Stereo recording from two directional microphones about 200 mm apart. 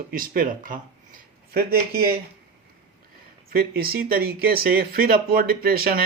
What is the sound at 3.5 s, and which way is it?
Speech, 50° right (ahead or behind).